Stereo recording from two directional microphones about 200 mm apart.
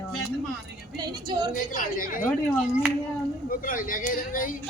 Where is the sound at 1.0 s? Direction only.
20° right (ahead or behind).